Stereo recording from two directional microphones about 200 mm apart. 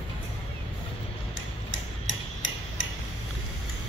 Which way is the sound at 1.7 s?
70° left (ahead or behind).